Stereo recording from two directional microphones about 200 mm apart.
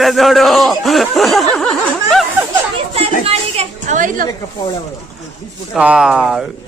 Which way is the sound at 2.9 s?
30° right (ahead or behind).